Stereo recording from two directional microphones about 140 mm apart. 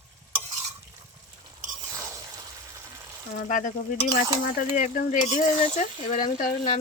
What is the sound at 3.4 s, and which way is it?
Speech, 70° left (ahead or behind).